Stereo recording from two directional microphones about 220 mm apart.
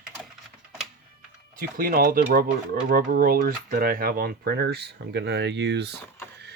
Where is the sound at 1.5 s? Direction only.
40° right (ahead or behind).